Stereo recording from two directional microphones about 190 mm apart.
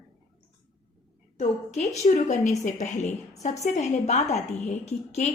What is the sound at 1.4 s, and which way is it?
A woman's voice, 35° left (ahead or behind).